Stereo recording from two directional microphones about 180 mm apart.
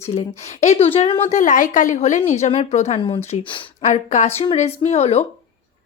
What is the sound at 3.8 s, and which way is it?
A woman's voice, 40° left (ahead or behind).